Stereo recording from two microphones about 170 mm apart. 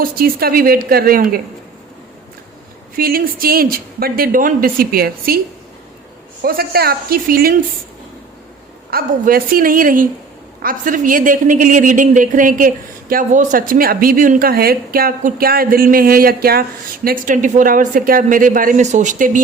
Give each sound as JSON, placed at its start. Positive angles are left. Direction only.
{"t": 0.0, "sound": "speech", "side_deg": -60}
{"t": 2.9, "sound": "speech", "side_deg": -60}
{"t": 6.4, "sound": "speech", "side_deg": -60}
{"t": 8.9, "sound": "speech", "side_deg": -60}